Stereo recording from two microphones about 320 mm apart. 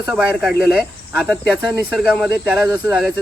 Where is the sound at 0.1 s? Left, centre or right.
Centre.